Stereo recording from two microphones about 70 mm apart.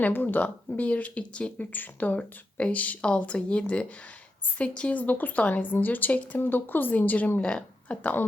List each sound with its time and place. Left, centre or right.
0.0 s speech: left